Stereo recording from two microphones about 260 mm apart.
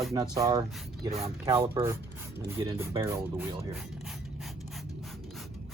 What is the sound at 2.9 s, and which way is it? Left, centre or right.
Speech, centre.